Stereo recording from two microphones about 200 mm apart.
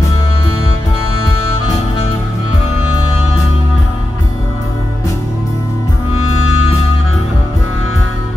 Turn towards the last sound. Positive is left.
turn(degrees=90)